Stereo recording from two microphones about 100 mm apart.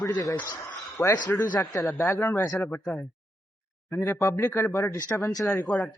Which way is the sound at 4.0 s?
30° left (ahead or behind).